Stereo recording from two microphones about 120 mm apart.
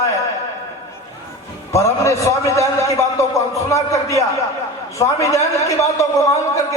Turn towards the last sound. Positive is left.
turn(degrees=25)  # may be behind; listen again after turning